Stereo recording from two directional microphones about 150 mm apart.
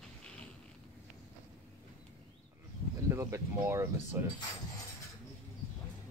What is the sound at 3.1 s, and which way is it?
Speech, 20° right (ahead or behind).